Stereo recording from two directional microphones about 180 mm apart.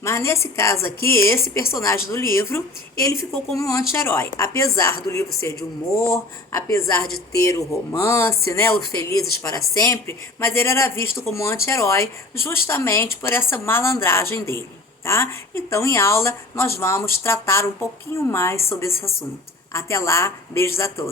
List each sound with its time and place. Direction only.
0.0 s speech: 15° left (ahead or behind)